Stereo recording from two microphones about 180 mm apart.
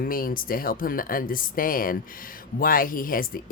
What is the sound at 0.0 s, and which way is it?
Speech, 55° left (ahead or behind).